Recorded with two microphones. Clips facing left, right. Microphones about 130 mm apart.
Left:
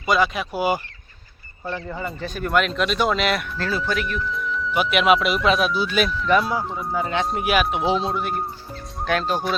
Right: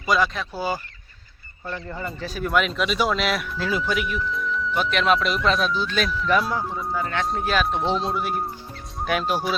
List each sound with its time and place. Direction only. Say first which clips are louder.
0.0 s speech: left 2 dB; 5° left (ahead or behind)
0.5 s speech: left 5 dB; 15° left (ahead or behind)
1.7 s speech: left 2 dB; centre (ahead or behind)
6.6 s speech: left 1 dB; 20° left (ahead or behind)
7.3 s speech: left 2 dB; 10° left (ahead or behind); by 9.6 s 5° right (ahead or behind)